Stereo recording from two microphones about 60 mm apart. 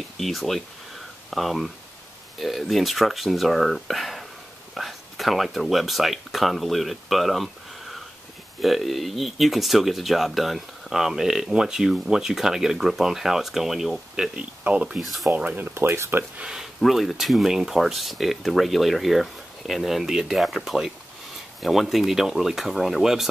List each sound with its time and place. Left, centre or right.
0.2 s speech: centre
8.5 s speech: centre
14.3 s speech: centre
15.0 s speech: centre
15.3 s speech: right
16.8 s speech: centre